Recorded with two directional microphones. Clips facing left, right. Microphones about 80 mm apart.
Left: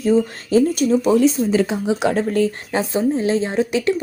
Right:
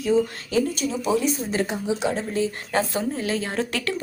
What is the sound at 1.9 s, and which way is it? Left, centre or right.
Speech, left.